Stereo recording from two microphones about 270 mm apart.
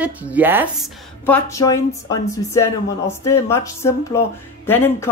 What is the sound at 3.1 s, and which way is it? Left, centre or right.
Speech, centre.